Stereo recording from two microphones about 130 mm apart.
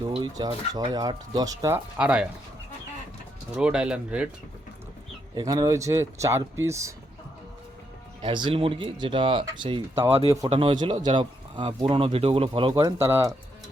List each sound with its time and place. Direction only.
0.2 s speech: 30° right (ahead or behind)
2.0 s speech: 10° right (ahead or behind)
3.5 s speech: 5° right (ahead or behind)
5.3 s speech: 30° right (ahead or behind)
8.2 s speech: 40° right (ahead or behind)
12.8 s speech: 20° right (ahead or behind)